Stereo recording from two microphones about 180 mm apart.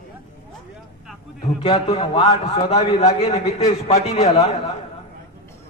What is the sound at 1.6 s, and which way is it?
A man's voice, 35° left (ahead or behind).